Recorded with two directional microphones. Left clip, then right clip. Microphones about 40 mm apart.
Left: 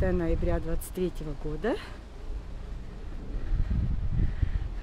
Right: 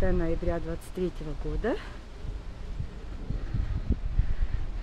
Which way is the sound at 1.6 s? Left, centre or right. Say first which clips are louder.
Even; left.